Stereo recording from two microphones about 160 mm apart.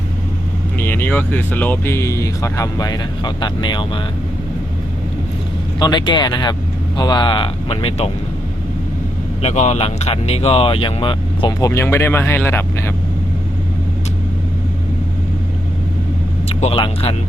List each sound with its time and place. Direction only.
0.8 s speech: 15° left (ahead or behind); by 4.0 s 30° left (ahead or behind)
5.8 s speech: 30° left (ahead or behind)
9.4 s speech: 45° left (ahead or behind); by 12.9 s 15° left (ahead or behind)
16.5 s speech: 40° left (ahead or behind)